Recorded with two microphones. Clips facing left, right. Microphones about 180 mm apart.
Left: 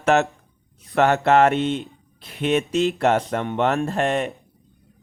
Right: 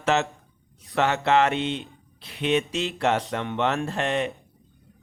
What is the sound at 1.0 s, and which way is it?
Speech, 50° left (ahead or behind).